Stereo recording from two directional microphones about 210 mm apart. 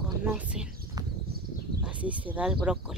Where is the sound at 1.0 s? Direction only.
20° right (ahead or behind).